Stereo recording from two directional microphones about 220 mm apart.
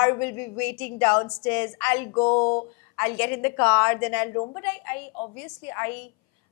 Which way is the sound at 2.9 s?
10° left (ahead or behind).